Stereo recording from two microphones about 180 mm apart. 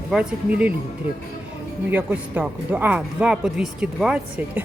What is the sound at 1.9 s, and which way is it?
Speech, 10° right (ahead or behind).